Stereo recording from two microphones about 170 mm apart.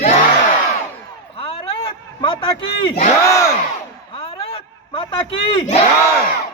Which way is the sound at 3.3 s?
20° left (ahead or behind).